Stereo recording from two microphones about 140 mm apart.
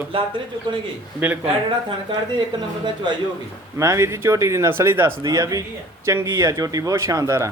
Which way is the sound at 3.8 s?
20° right (ahead or behind).